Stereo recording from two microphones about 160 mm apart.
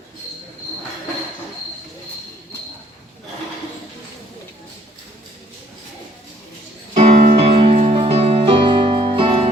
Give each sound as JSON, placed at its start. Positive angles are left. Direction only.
{"t": 6.9, "sound": "music", "side_deg": -45}